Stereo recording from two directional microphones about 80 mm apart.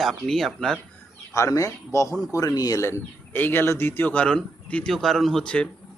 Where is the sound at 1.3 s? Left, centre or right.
Left.